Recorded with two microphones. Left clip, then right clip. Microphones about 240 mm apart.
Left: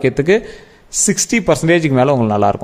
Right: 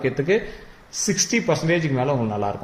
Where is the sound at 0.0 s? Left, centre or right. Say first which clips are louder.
Left 7 dB; left.